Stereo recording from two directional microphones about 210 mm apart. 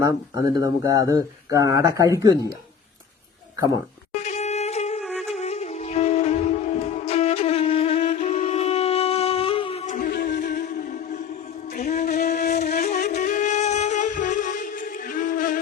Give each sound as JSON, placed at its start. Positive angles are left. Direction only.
{"t": 0.5, "sound": "speech", "side_deg": -15}
{"t": 4.1, "sound": "a sound", "side_deg": 35}
{"t": 5.2, "sound": "music", "side_deg": 30}
{"t": 11.9, "sound": "wind instrument", "side_deg": 40}
{"t": 13.1, "sound": "music", "side_deg": 35}